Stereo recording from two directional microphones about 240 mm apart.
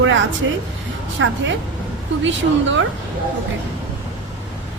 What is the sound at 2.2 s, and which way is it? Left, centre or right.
Speech, right.